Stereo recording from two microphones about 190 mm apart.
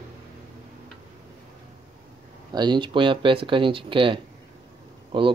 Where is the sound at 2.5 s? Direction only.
25° right (ahead or behind).